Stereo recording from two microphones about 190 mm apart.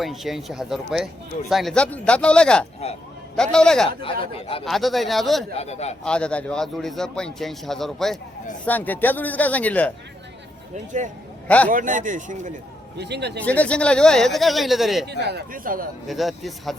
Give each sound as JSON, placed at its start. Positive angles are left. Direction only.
{"t": 0.0, "sound": "a man's voice", "side_deg": 0}
{"t": 5.5, "sound": "a man's voice", "side_deg": 35}
{"t": 6.1, "sound": "a man's voice", "side_deg": 5}
{"t": 11.4, "sound": "a man's voice", "side_deg": 5}
{"t": 11.7, "sound": "speech", "side_deg": -45}
{"t": 13.0, "sound": "speech", "side_deg": -60}
{"t": 13.4, "sound": "a man's voice", "side_deg": 5}
{"t": 15.0, "sound": "a man's voice", "side_deg": -60}
{"t": 16.0, "sound": "a man's voice", "side_deg": 0}